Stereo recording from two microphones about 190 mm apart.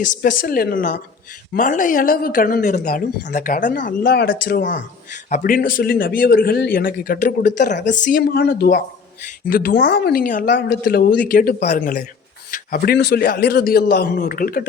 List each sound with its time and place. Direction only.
0.0 s a woman's voice: 45° left (ahead or behind)
10.4 s a woman's voice: 60° left (ahead or behind)